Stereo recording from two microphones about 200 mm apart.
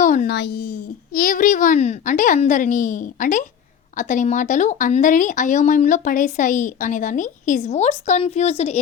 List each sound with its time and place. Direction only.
0.0 s a child's voice: 40° left (ahead or behind)
0.3 s a child's voice: 55° left (ahead or behind)
1.1 s speech: 40° left (ahead or behind)